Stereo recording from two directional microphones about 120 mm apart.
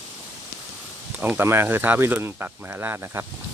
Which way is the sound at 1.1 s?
15° right (ahead or behind).